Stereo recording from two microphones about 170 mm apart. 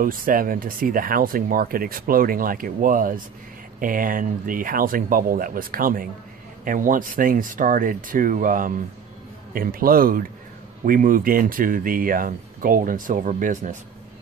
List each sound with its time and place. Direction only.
0.0 s speech: 55° right (ahead or behind)